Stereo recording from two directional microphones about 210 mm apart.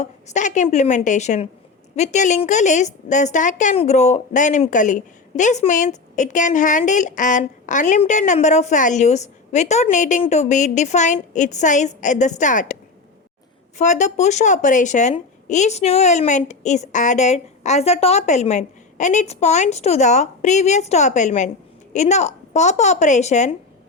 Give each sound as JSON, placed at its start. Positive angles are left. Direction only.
{"t": 0.0, "sound": "a woman's voice", "side_deg": 35}
{"t": 13.7, "sound": "a woman's voice", "side_deg": 35}